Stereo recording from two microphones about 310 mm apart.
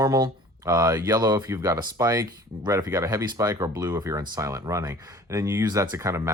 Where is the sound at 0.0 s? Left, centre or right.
Centre.